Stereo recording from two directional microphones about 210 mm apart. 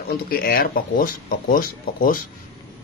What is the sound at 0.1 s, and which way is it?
Speech, 45° left (ahead or behind).